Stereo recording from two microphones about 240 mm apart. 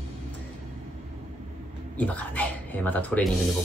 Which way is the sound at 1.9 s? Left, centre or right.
Centre.